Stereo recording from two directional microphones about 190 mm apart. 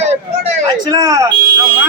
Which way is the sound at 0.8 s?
20° right (ahead or behind).